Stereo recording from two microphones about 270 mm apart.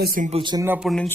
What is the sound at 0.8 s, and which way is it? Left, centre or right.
Speech, centre.